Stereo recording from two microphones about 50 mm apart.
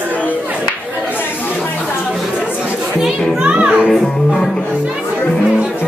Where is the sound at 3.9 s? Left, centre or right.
Centre.